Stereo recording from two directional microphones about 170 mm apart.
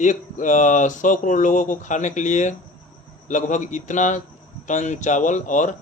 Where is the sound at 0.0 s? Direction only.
45° left (ahead or behind).